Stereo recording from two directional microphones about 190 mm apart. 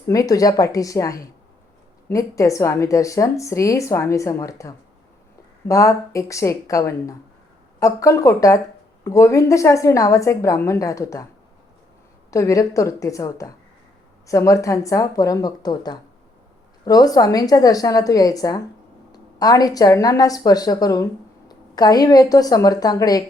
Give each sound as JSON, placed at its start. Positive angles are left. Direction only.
{"t": 0.1, "sound": "speech", "side_deg": 20}
{"t": 12.3, "sound": "a woman's voice", "side_deg": 15}